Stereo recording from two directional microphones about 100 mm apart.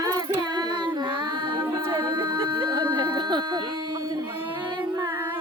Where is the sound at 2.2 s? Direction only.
50° right (ahead or behind).